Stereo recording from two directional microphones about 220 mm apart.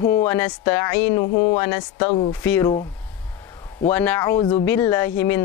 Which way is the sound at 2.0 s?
25° left (ahead or behind).